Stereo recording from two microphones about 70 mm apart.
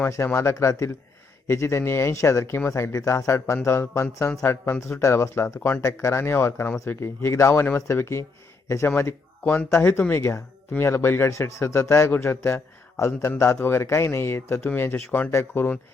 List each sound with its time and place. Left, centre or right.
0.3 s speech: left
6.0 s speech: left
9.4 s speech: left
9.7 s a man's voice: left